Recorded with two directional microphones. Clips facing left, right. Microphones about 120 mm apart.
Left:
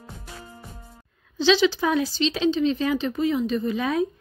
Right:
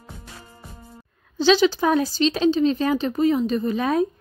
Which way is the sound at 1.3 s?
45° right (ahead or behind).